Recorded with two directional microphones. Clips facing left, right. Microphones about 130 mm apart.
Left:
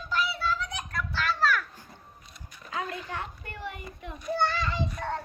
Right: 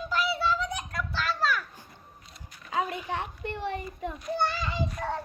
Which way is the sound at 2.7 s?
20° right (ahead or behind).